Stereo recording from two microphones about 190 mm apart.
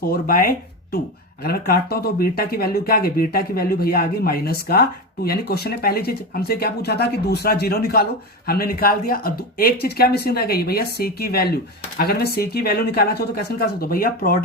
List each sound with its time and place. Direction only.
0.1 s speech: 50° left (ahead or behind)